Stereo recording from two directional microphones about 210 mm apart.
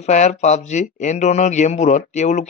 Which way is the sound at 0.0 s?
35° left (ahead or behind).